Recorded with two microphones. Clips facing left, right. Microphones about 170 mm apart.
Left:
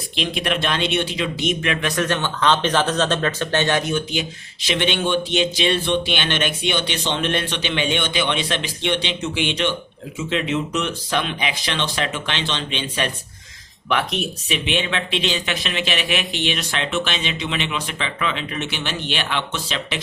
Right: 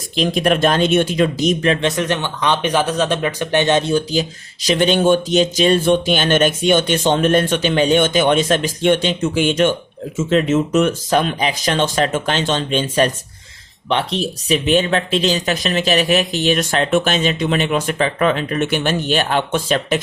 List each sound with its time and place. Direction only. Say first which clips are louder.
0.2 s speech: right 8 dB; 45° right (ahead or behind)